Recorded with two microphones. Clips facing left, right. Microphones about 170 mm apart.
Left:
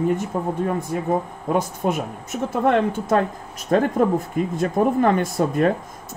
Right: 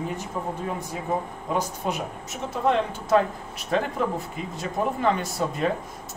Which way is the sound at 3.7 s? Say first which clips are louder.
Left 7 dB; 45° left (ahead or behind).